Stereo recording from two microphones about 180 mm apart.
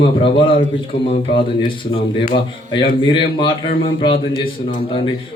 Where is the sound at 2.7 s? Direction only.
25° left (ahead or behind).